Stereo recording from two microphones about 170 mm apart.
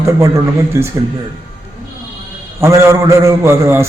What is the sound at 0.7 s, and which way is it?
Speech, 15° right (ahead or behind).